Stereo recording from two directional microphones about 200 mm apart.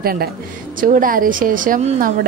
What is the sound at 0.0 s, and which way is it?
Speech, 50° right (ahead or behind).